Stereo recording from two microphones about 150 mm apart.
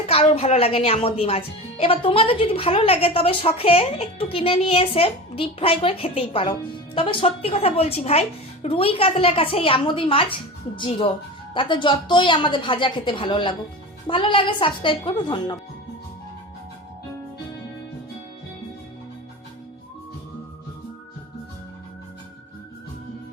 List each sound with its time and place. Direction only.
0.1 s a woman's voice: 40° left (ahead or behind)